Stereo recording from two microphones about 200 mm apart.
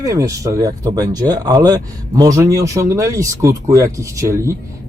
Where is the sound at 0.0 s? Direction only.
15° right (ahead or behind).